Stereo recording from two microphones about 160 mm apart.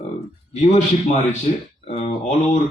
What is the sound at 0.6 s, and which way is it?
Speech, 45° left (ahead or behind).